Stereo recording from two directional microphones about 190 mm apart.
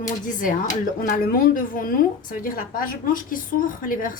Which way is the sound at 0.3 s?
45° left (ahead or behind).